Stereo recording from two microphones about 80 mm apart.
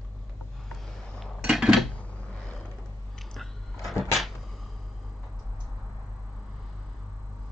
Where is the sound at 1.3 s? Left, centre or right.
Centre.